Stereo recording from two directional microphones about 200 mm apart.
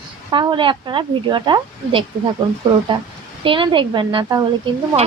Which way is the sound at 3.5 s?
25° right (ahead or behind).